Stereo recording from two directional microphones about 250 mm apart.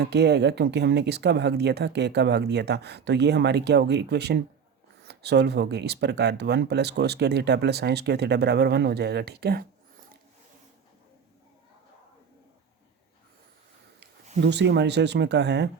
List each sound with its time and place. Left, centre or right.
0.0 s speech: right
14.4 s speech: right